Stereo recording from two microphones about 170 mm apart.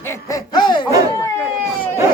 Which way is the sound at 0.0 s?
15° left (ahead or behind).